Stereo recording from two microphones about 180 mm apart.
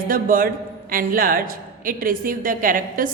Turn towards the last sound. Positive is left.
turn(degrees=-50)  # may be behind; listen again after turning